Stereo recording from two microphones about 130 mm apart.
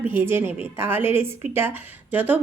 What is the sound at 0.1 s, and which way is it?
A woman's voice, 15° right (ahead or behind).